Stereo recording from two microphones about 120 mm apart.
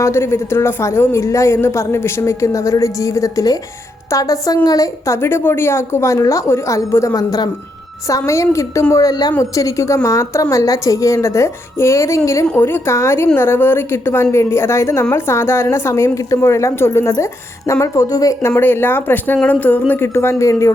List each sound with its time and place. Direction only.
0.0 s speech: 20° left (ahead or behind)